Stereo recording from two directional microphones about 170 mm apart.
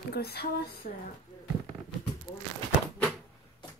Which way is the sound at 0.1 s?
70° left (ahead or behind).